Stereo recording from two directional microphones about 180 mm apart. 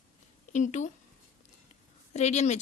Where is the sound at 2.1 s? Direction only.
40° left (ahead or behind).